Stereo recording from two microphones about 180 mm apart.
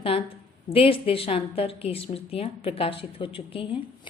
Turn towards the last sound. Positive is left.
turn(degrees=30)  # may be behind; listen again after turning